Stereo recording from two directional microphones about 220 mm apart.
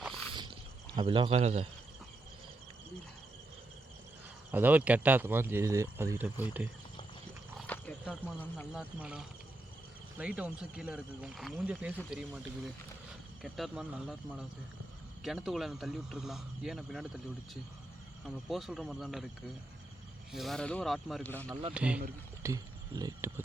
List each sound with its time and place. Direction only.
0.1 s a sound: 20° right (ahead or behind)
0.9 s a man's voice: 20° right (ahead or behind)
4.5 s speech: 5° right (ahead or behind)
7.7 s speech: 5° left (ahead or behind)
8.7 s a man's voice: 5° right (ahead or behind)
20.3 s a man's voice: centre (ahead or behind)
21.7 s a man's voice: 5° right (ahead or behind)
22.4 s speech: 15° right (ahead or behind)